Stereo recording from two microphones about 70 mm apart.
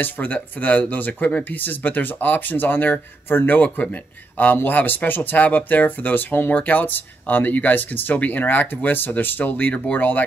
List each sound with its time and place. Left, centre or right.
0.0 s speech: left